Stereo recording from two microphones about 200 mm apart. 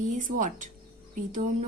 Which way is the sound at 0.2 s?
40° right (ahead or behind).